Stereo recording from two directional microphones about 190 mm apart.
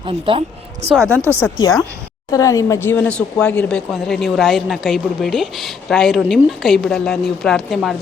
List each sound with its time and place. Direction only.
0.0 s speech: 30° right (ahead or behind)
1.1 s speech: 15° right (ahead or behind)
2.3 s speech: 15° left (ahead or behind); by 7.9 s centre (ahead or behind)